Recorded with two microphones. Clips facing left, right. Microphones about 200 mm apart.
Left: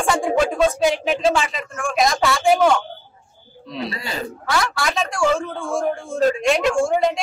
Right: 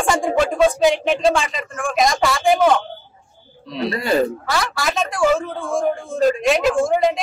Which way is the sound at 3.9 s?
55° right (ahead or behind).